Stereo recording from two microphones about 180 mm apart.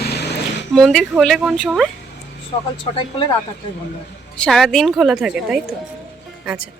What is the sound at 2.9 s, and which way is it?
Speech, 35° left (ahead or behind).